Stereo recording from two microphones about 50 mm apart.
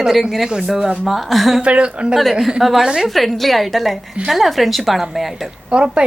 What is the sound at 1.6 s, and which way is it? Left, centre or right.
Speech, right.